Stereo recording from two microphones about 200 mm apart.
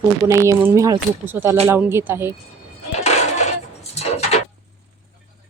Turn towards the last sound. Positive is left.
turn(degrees=30)  # may be behind; listen again after turning